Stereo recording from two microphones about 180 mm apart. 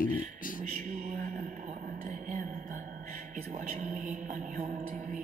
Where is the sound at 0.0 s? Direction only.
50° left (ahead or behind).